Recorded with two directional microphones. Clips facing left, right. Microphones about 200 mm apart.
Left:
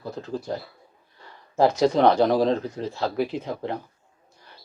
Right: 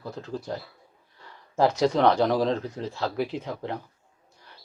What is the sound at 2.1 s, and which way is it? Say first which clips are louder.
Speech: left 3 dB; 25° left (ahead or behind).